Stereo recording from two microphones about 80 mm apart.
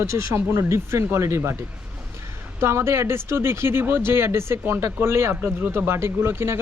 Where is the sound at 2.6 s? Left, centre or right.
Right.